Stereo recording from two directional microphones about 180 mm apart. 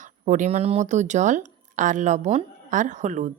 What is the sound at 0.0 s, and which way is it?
A woman's voice, 45° right (ahead or behind).